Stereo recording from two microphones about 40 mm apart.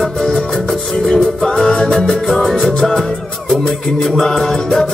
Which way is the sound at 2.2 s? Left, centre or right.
Centre.